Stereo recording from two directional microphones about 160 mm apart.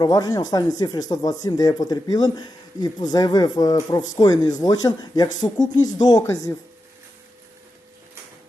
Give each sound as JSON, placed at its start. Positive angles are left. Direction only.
{"t": 0.0, "sound": "speech", "side_deg": 25}